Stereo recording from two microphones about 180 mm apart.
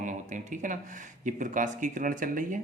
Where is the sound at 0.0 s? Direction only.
45° right (ahead or behind).